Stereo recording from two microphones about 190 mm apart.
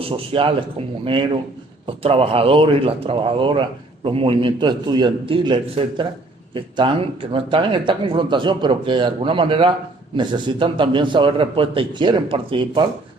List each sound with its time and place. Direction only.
0.0 s speech: 25° right (ahead or behind)